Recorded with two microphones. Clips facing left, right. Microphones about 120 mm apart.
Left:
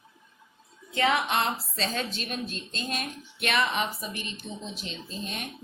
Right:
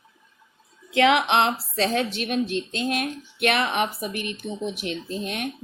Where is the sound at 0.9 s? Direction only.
85° right.